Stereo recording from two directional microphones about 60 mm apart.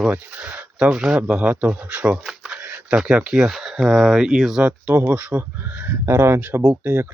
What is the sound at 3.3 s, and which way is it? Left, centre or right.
Speech, centre.